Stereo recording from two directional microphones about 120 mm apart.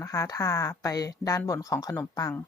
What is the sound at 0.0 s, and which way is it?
Speech, 30° left (ahead or behind).